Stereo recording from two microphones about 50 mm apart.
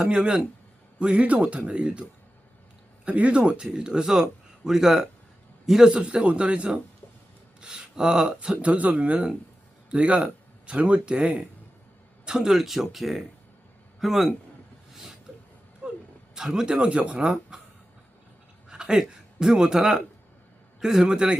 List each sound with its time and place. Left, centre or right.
0.0 s speech: centre
3.1 s a man's voice: right; by 5.9 s centre
5.9 s speech: right; by 14.3 s centre
15.8 s a sound: right
16.3 s a man's voice: centre
18.7 s a man's voice: centre